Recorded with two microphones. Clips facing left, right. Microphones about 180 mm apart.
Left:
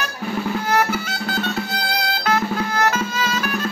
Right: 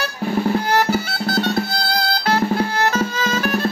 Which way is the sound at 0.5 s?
35° right (ahead or behind).